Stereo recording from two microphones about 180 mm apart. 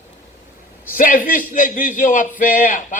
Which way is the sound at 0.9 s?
50° left (ahead or behind).